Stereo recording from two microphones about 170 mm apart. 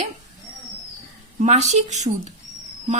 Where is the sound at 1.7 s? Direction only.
40° right (ahead or behind).